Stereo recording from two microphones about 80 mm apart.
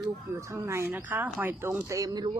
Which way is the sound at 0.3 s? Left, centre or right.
Right.